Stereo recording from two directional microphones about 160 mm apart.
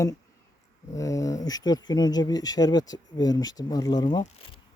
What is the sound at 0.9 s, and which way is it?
Speech, 20° left (ahead or behind).